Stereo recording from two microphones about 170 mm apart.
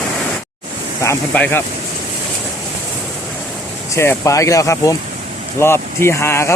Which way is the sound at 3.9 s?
15° left (ahead or behind).